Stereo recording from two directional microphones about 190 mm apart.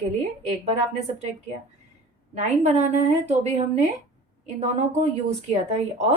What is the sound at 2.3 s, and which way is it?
Speech, 35° right (ahead or behind).